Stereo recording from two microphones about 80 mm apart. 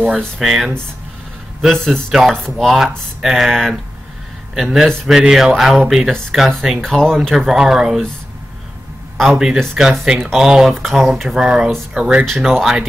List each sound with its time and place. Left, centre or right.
0.4 s speech: centre
9.2 s speech: centre
12.3 s speech: centre